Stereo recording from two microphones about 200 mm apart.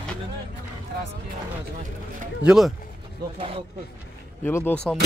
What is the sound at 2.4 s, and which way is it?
Speech, 5° right (ahead or behind).